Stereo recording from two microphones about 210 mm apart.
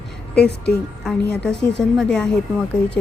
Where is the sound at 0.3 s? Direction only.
50° left (ahead or behind).